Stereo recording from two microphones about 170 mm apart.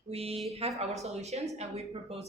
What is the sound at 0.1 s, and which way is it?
Speech, 35° right (ahead or behind).